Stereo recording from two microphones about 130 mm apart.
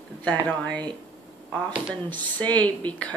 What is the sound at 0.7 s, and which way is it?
Speech, 35° right (ahead or behind).